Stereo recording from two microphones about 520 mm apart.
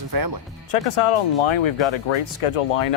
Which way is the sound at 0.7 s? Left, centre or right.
Left.